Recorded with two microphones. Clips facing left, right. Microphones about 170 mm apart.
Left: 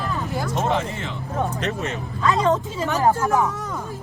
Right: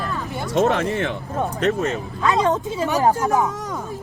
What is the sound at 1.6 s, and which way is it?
Speech, 40° right (ahead or behind).